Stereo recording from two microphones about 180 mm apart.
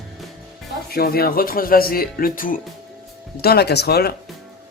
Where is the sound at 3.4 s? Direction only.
60° left (ahead or behind).